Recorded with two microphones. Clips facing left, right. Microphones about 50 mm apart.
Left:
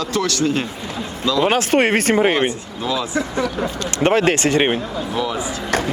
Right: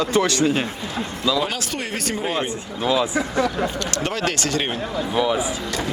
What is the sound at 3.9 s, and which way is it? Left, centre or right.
Speech, left.